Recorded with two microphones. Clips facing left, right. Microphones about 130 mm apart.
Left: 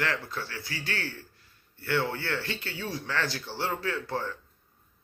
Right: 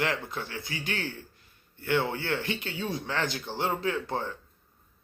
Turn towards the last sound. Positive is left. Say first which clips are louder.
# right 1 dB
turn(degrees=-20)  # may be behind; listen again after turning